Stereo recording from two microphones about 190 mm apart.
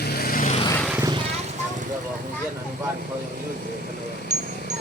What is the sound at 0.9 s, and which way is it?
Vehicle, 20° right (ahead or behind).